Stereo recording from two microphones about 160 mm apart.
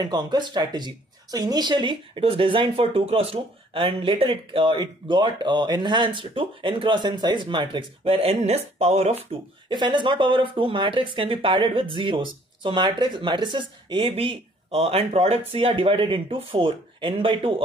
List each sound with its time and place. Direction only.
0.0 s speech: 25° right (ahead or behind); by 9.1 s 45° right (ahead or behind)
9.7 s speech: 30° right (ahead or behind)